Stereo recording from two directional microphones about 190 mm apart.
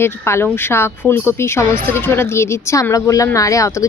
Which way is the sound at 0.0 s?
15° left (ahead or behind).